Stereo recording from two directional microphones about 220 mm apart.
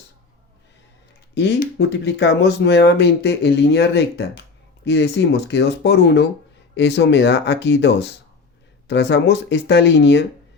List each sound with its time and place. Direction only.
1.4 s speech: 50° left (ahead or behind)